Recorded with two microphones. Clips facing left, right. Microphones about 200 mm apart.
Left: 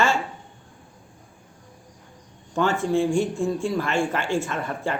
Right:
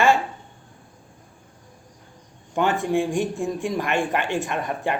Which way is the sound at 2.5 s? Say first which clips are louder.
Even; 15° right (ahead or behind).